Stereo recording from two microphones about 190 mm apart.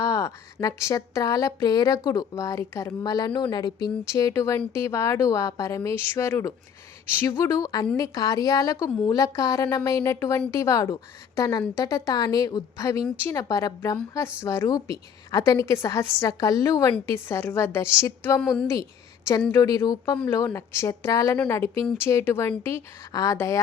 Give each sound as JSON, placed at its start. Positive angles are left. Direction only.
{"t": 0.0, "sound": "speech", "side_deg": 15}
{"t": 18.3, "sound": "a woman's voice", "side_deg": 5}
{"t": 18.7, "sound": "a woman's voice", "side_deg": 15}